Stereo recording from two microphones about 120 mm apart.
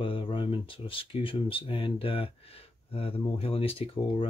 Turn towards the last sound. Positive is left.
turn(degrees=55)  # may be behind; listen again after turning